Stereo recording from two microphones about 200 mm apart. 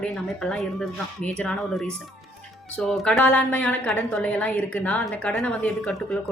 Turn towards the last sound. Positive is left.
turn(degrees=5)  # may be behind; listen again after turning